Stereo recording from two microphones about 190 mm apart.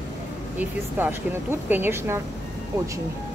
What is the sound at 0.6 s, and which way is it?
Speech, 10° right (ahead or behind).